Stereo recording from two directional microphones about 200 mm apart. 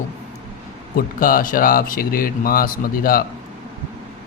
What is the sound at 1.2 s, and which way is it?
Speech, 45° left (ahead or behind).